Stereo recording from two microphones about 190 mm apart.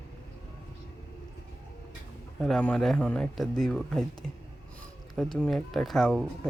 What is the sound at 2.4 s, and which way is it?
Speech, 5° left (ahead or behind).